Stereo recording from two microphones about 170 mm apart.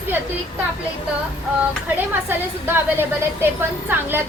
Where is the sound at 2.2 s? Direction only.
10° right (ahead or behind).